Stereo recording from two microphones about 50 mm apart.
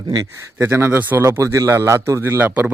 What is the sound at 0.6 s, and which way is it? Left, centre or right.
Speech, right.